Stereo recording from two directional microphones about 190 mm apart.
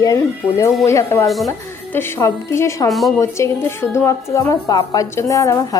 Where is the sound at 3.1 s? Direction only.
15° left (ahead or behind).